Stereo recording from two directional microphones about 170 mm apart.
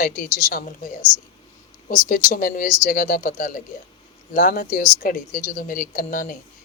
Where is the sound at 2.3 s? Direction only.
55° left (ahead or behind).